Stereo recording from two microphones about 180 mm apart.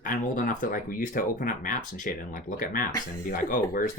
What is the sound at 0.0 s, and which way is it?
Speech, 50° left (ahead or behind).